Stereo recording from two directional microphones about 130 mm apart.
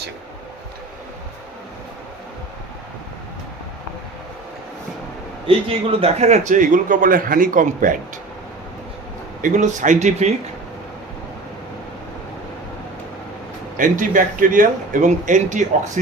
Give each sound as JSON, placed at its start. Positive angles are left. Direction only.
{"t": 5.5, "sound": "a man's voice", "side_deg": -45}
{"t": 9.4, "sound": "speech", "side_deg": -75}
{"t": 13.7, "sound": "a man's voice", "side_deg": -90}